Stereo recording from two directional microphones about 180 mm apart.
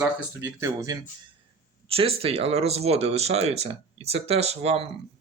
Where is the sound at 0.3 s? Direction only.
15° right (ahead or behind).